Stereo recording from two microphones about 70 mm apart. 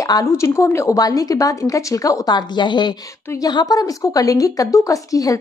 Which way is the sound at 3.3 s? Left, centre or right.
Left.